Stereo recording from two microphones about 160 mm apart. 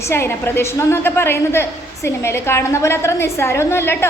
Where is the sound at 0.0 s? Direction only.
15° left (ahead or behind).